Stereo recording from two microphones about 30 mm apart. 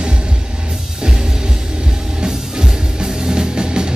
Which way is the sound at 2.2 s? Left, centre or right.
Right.